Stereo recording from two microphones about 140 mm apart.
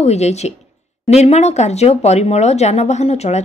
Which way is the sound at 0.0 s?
50° left (ahead or behind).